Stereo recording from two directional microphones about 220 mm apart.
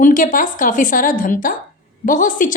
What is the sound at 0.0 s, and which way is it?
A woman's voice, 35° left (ahead or behind).